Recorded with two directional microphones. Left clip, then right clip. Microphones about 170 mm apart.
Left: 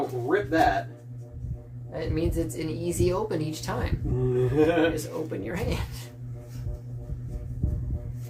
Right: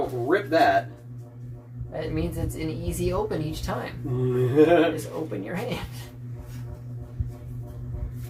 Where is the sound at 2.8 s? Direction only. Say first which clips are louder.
Left 1 dB; 55° left (ahead or behind).